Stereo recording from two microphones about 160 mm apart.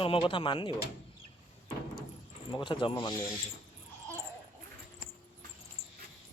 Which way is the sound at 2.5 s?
30° left (ahead or behind).